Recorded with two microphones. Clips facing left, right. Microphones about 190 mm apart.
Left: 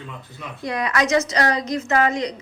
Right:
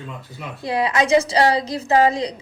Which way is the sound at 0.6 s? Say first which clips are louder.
Right 2 dB; 30° right (ahead or behind).